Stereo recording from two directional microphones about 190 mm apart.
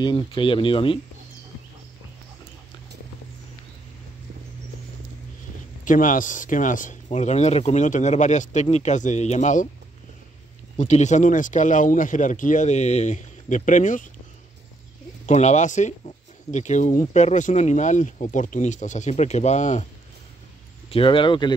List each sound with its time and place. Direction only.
0.0 s speech: 25° left (ahead or behind)
5.9 s speech: 45° left (ahead or behind)
10.8 s speech: 40° left (ahead or behind)
15.2 s speech: 40° left (ahead or behind)
20.9 s speech: 25° left (ahead or behind)